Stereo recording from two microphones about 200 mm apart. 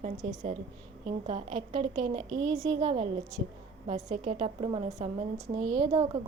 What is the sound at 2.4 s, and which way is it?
Speech, centre (ahead or behind).